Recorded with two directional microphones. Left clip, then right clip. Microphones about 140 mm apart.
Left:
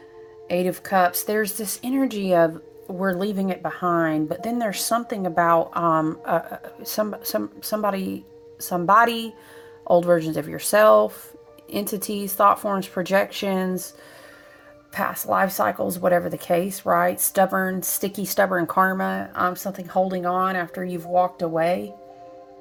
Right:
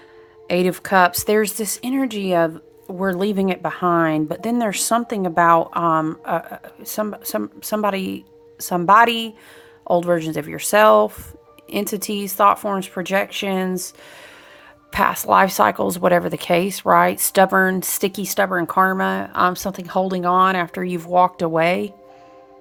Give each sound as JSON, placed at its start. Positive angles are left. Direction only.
{"t": 0.4, "sound": "speech", "side_deg": -40}
{"t": 5.8, "sound": "speech", "side_deg": -10}
{"t": 14.9, "sound": "speech", "side_deg": -40}
{"t": 18.1, "sound": "speech", "side_deg": -10}
{"t": 19.2, "sound": "speech", "side_deg": -45}